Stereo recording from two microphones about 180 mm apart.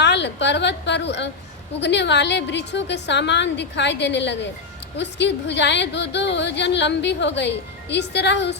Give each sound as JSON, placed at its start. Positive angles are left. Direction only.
{"t": 0.0, "sound": "a woman's voice", "side_deg": 75}